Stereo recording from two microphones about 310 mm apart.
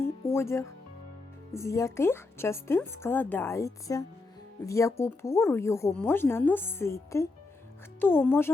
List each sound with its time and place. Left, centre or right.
0.0 s music: centre
1.5 s a woman's voice: centre